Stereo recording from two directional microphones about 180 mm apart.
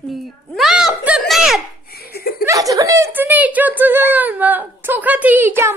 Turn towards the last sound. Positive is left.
turn(degrees=-10)  # may be behind; listen again after turning